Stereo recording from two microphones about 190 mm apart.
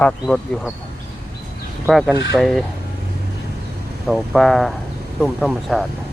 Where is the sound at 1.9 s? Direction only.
Centre (ahead or behind).